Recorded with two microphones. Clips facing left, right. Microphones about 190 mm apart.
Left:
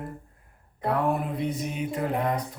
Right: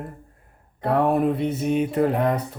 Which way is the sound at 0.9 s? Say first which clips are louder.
Right 7 dB; 65° right (ahead or behind).